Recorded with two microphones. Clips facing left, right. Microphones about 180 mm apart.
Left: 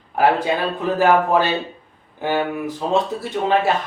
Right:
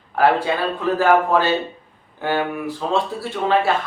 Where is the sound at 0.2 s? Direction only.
20° left (ahead or behind).